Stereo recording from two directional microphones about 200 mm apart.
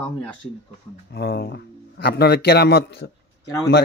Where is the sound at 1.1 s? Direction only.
50° left (ahead or behind).